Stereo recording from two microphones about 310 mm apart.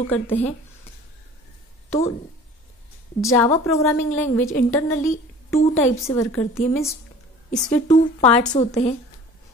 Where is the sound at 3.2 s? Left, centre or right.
Centre.